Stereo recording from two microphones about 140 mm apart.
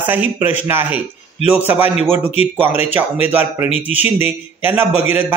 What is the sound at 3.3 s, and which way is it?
Speech, 15° right (ahead or behind).